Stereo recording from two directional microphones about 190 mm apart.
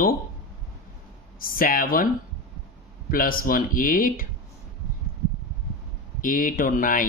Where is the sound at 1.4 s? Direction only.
50° left (ahead or behind).